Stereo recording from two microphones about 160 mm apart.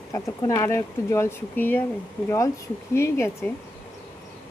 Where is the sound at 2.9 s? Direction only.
15° left (ahead or behind).